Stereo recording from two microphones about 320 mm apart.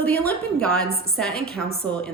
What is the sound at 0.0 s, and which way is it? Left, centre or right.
Speech, centre.